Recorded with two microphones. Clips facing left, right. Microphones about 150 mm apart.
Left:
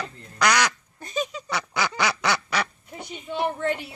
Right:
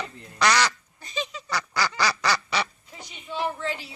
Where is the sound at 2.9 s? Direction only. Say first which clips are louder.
Left 4 dB; 50° left (ahead or behind).